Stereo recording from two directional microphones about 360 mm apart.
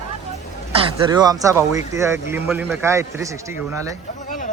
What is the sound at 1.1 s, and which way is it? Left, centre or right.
Speech, centre.